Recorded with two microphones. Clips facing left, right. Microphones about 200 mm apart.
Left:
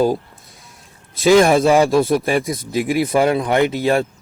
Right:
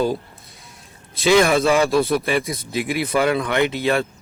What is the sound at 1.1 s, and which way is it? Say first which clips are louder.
A man's voice: left 4 dB; 45° left (ahead or behind).